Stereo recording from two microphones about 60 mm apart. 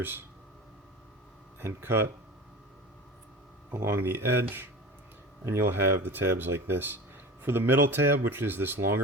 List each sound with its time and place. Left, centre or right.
1.5 s speech: right
3.8 s speech: right